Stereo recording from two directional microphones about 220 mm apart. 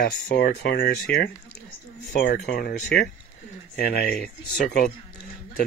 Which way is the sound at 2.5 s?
45° left (ahead or behind).